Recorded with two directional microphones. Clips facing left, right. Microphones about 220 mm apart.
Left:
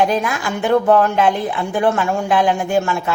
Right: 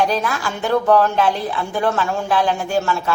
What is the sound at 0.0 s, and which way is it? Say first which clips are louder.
A woman's voice: left 2 dB; 15° left (ahead or behind).